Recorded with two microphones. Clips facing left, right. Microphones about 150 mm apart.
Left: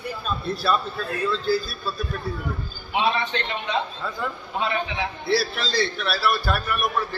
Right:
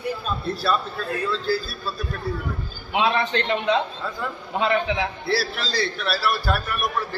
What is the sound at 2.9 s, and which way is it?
Speech, 90° right.